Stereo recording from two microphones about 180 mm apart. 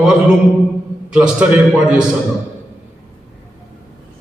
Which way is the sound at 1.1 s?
5° right (ahead or behind).